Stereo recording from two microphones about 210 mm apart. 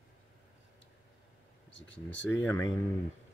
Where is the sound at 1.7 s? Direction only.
60° left (ahead or behind).